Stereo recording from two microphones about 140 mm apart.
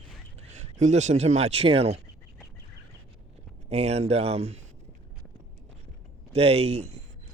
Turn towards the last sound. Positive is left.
turn(degrees=-50)  # may be behind; listen again after turning